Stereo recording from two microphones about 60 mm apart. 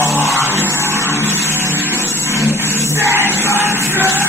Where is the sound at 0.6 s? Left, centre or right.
Right.